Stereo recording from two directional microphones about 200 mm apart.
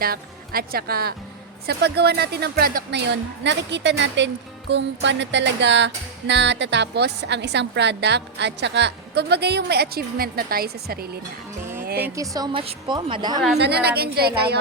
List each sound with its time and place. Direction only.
0.0 s speech: 50° right (ahead or behind)
1.6 s music: 55° right (ahead or behind)
12.1 s a woman's voice: 15° right (ahead or behind)
13.6 s a woman's voice: 55° right (ahead or behind)